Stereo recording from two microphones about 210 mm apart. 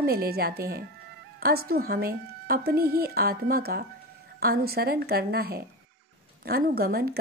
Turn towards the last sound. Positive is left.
turn(degrees=-50)  # may be behind; listen again after turning